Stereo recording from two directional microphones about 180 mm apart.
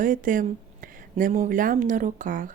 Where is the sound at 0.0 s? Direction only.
50° right (ahead or behind).